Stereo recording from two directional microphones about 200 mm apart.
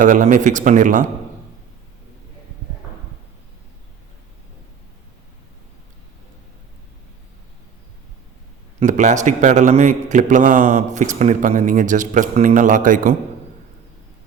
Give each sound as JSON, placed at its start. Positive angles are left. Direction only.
{"t": 0.0, "sound": "a man's voice", "side_deg": -40}
{"t": 8.8, "sound": "a man's voice", "side_deg": -35}